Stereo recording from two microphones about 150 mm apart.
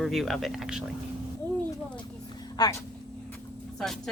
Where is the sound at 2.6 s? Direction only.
25° left (ahead or behind).